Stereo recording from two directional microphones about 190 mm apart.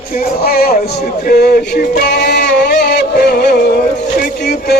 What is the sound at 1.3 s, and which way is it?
Music, 55° left (ahead or behind).